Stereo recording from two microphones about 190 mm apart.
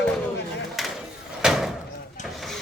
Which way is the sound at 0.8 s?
Centre (ahead or behind).